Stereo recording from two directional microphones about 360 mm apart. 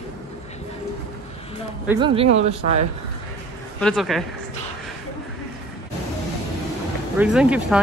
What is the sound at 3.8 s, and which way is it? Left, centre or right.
Speech, centre.